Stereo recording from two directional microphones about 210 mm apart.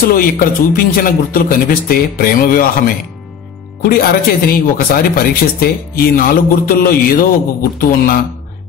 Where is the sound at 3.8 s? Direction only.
45° left (ahead or behind).